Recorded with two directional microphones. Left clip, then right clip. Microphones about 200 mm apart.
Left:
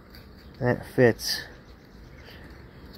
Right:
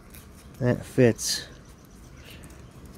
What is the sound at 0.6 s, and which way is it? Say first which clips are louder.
Speech: left 1 dB; 25° right (ahead or behind).